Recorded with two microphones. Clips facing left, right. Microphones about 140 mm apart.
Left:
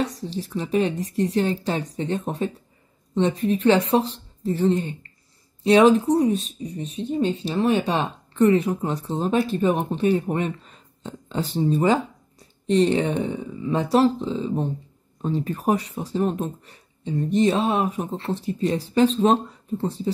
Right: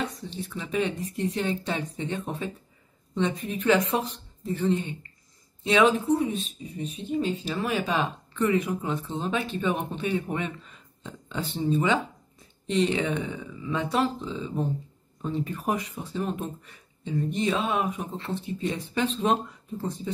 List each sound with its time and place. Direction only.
0.0 s speech: 35° left (ahead or behind)